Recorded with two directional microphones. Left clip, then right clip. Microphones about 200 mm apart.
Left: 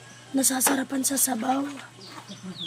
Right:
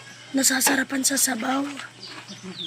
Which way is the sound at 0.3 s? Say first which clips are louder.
Right 3 dB; 10° left (ahead or behind).